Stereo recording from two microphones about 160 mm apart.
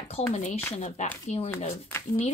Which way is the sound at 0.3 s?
50° left (ahead or behind).